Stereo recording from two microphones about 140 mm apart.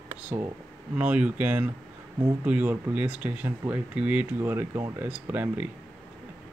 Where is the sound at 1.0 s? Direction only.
10° right (ahead or behind).